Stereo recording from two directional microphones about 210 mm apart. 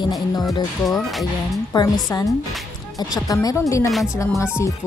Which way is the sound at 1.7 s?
20° left (ahead or behind).